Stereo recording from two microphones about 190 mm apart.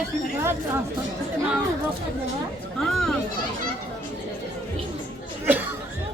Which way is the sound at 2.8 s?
Centre (ahead or behind).